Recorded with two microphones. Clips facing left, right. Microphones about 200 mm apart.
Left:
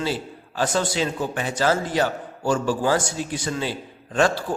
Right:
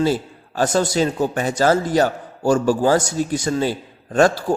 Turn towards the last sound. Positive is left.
turn(degrees=-45)  # may be behind; listen again after turning